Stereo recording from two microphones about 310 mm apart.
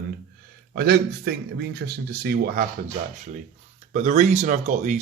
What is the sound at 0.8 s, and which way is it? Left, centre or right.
Speech, right.